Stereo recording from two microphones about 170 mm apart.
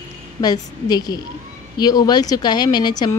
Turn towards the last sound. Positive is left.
turn(degrees=25)  # may be behind; listen again after turning